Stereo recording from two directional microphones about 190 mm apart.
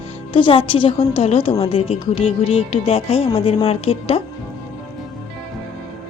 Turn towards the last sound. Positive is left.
turn(degrees=30)  # may be behind; listen again after turning